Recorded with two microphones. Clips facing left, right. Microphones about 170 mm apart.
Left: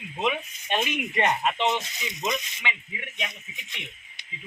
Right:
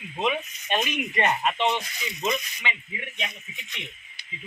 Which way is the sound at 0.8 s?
25° left (ahead or behind).